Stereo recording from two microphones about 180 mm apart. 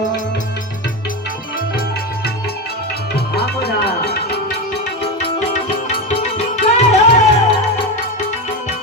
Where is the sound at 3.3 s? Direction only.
65° left (ahead or behind).